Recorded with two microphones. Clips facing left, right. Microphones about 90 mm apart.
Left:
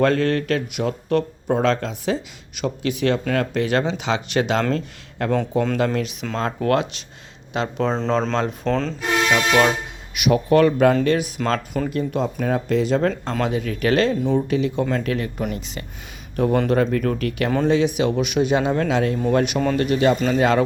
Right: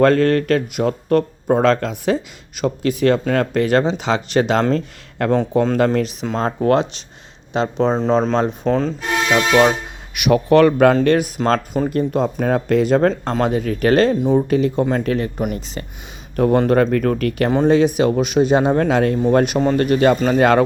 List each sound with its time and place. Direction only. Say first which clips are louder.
0.0 s speech: right 5 dB; 45° right (ahead or behind)
2.6 s speech: right 5 dB; 40° right (ahead or behind)
6.2 s speech: right 4 dB; 20° right (ahead or behind)
7.9 s speech: right 4 dB; 15° right (ahead or behind)
9.5 s speech: right 4 dB; 30° right (ahead or behind)
10.2 s speech: right 3 dB; 65° right (ahead or behind)
11.0 s speech: right 4 dB; 55° right (ahead or behind)
11.3 s speech: right 5 dB; 30° right (ahead or behind)
11.9 s speech: right 5 dB; 45° right (ahead or behind)
15.0 s speech: right 4 dB; 35° right (ahead or behind); by 20.7 s 55° right (ahead or behind)